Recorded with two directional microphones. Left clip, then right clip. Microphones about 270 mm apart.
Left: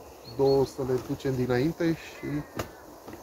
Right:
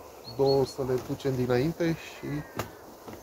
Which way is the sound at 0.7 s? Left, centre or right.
Centre.